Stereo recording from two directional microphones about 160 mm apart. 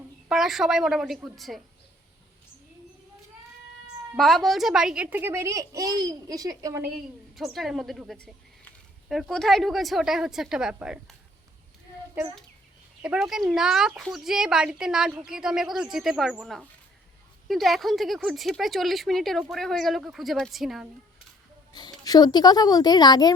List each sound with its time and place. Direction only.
0.3 s a woman's voice: centre (ahead or behind)
4.2 s a woman's voice: centre (ahead or behind); by 6.9 s 20° right (ahead or behind)
7.3 s a woman's voice: centre (ahead or behind)
13.0 s a woman's voice: 5° right (ahead or behind)
21.8 s speech: 25° left (ahead or behind)